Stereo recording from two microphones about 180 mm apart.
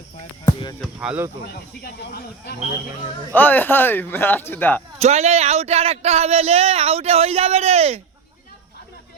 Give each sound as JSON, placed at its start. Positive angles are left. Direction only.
{"t": 0.4, "sound": "speech", "side_deg": 20}
{"t": 1.0, "sound": "speech", "side_deg": -10}
{"t": 1.8, "sound": "speech", "side_deg": 65}
{"t": 3.3, "sound": "speech", "side_deg": 10}
{"t": 4.9, "sound": "speech", "side_deg": -40}